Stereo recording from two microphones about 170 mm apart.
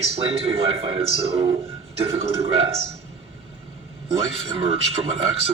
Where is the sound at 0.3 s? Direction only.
35° right (ahead or behind).